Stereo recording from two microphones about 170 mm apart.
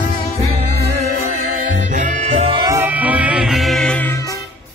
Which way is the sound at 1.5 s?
50° right (ahead or behind).